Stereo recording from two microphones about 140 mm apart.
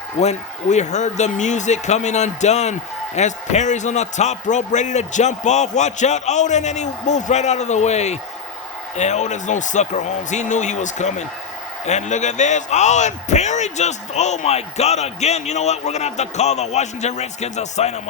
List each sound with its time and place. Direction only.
0.2 s a man's voice: 55° left (ahead or behind)